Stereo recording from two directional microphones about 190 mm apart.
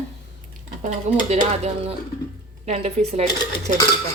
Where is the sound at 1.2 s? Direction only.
35° right (ahead or behind).